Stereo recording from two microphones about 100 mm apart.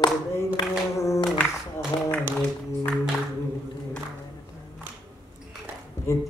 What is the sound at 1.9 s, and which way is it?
Speech, 45° left (ahead or behind).